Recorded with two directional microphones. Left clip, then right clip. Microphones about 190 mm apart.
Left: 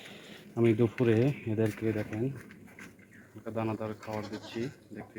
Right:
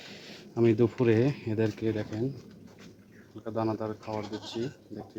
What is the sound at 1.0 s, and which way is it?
Speech, 5° right (ahead or behind).